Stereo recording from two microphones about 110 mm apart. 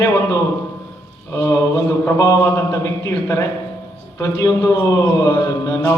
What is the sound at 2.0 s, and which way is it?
A man's voice, 25° left (ahead or behind).